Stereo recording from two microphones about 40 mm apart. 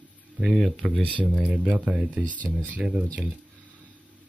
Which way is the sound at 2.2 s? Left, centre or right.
Left.